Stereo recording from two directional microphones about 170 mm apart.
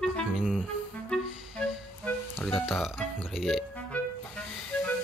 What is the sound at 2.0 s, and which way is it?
Music, 10° left (ahead or behind).